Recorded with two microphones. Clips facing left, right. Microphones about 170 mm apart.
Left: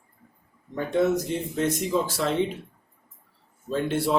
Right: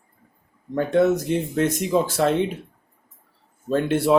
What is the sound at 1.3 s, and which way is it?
Speech, 60° right (ahead or behind).